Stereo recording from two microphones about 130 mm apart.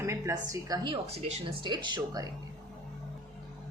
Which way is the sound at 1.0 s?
55° right (ahead or behind).